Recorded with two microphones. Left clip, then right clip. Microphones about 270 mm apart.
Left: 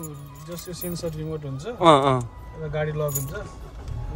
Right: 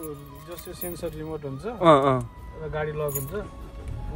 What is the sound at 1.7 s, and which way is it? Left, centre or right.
Speech, centre.